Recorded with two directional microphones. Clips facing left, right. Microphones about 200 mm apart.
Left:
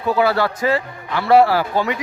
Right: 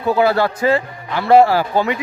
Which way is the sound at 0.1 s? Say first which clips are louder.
Right 2 dB; 25° right (ahead or behind).